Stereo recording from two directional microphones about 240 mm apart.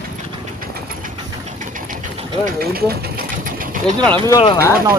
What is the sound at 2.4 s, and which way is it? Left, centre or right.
Sewing machine, right.